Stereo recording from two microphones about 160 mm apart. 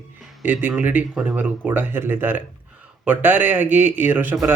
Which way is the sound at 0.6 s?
10° right (ahead or behind).